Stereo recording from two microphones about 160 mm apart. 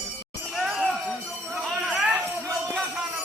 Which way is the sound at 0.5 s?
Centre (ahead or behind).